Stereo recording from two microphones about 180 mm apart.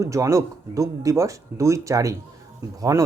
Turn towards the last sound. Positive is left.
turn(degrees=-20)  # may be behind; listen again after turning